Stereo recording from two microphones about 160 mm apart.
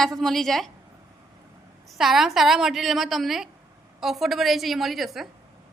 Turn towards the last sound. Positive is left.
turn(degrees=0)  # may be behind; listen again after turning